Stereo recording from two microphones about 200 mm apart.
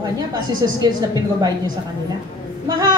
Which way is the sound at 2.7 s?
20° right (ahead or behind).